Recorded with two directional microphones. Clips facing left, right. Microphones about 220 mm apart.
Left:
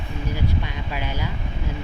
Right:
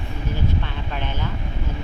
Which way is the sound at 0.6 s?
10° left (ahead or behind).